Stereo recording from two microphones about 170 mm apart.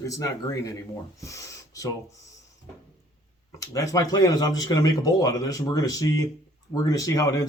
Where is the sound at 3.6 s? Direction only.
20° left (ahead or behind).